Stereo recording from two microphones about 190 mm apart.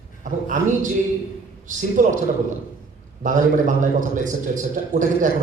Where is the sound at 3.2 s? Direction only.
40° right (ahead or behind).